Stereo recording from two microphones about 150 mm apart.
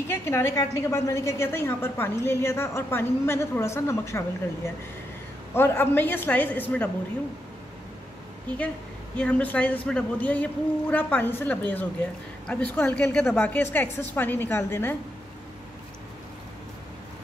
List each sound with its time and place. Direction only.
0.1 s a woman's voice: 15° left (ahead or behind)
5.5 s a woman's voice: 15° left (ahead or behind)
9.1 s a woman's voice: 10° left (ahead or behind)